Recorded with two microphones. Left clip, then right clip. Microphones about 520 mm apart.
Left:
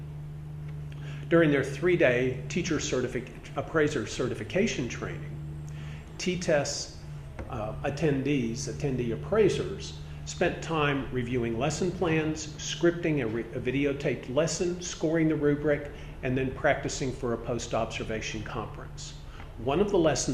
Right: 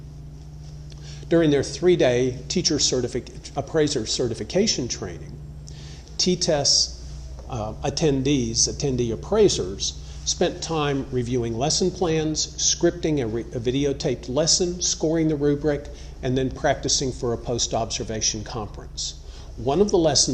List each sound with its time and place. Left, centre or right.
1.3 s speech: right
6.1 s speech: right
7.5 s speech: right
19.6 s speech: right